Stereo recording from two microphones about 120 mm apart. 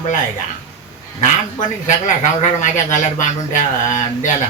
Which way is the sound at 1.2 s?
90° left.